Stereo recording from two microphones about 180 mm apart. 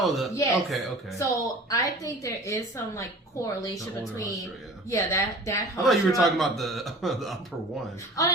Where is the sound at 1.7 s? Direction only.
20° left (ahead or behind).